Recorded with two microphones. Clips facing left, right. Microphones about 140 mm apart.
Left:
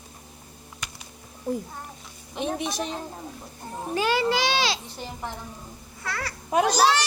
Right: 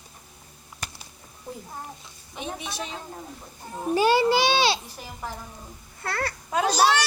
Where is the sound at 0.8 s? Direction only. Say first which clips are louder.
Right 2 dB; 40° right (ahead or behind).